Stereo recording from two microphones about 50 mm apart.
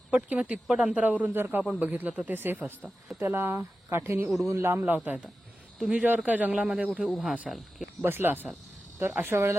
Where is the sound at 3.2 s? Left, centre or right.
Right.